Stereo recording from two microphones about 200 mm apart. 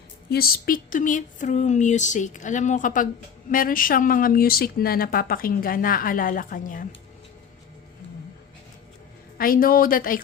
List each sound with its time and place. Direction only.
0.3 s speech: 50° left (ahead or behind)
9.4 s speech: 45° left (ahead or behind)